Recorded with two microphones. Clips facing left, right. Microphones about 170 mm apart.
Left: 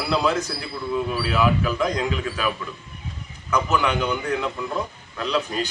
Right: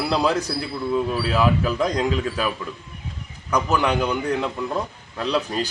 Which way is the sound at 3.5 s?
35° right (ahead or behind).